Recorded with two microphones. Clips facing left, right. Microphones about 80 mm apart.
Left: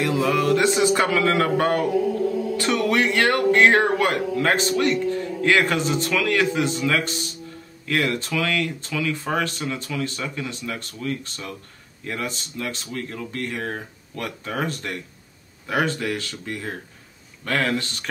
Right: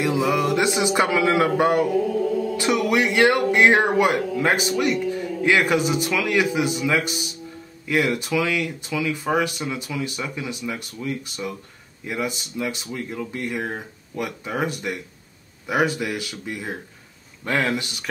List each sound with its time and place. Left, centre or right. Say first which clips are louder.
0.0 s speech: even; centre